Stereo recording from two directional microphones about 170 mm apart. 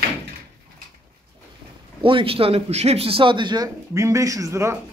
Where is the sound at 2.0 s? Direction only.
30° right (ahead or behind).